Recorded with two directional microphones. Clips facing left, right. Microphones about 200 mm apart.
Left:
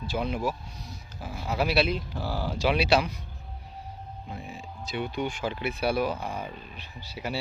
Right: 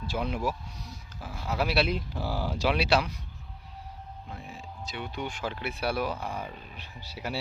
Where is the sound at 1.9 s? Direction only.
10° right (ahead or behind).